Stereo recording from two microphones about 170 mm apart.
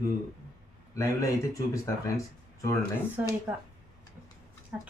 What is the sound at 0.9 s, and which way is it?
Speech, 20° left (ahead or behind).